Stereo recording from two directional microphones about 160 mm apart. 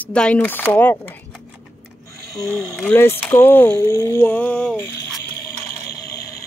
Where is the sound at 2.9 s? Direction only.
15° left (ahead or behind).